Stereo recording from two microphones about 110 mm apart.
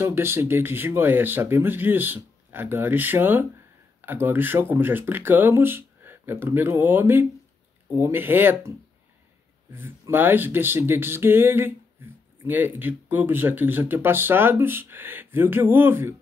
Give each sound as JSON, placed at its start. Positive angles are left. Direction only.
{"t": 0.0, "sound": "speech", "side_deg": -20}